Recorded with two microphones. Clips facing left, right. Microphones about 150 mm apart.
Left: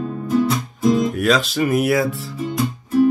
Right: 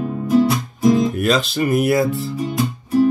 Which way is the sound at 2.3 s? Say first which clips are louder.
Right 1 dB; 15° right (ahead or behind).